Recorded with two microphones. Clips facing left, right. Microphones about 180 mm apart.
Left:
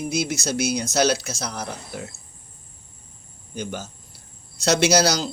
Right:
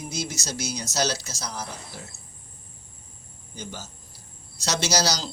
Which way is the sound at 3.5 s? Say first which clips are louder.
Left 7 dB; 60° left (ahead or behind).